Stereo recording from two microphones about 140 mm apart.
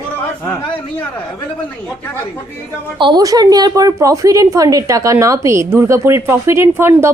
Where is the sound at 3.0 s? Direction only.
30° right (ahead or behind).